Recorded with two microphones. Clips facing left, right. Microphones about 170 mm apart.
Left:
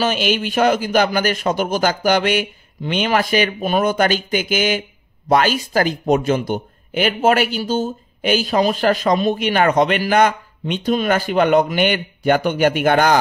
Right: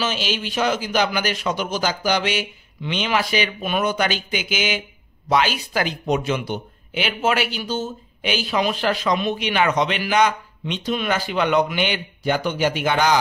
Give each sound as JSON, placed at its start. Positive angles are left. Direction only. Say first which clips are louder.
{"t": 0.0, "sound": "speech", "louder": "left 6 dB", "side_deg": 55}